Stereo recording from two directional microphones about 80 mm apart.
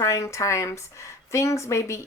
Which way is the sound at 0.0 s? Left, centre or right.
Left.